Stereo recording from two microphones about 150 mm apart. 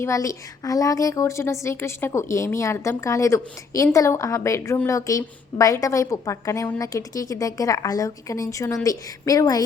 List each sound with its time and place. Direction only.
0.0 s a woman's voice: 20° left (ahead or behind)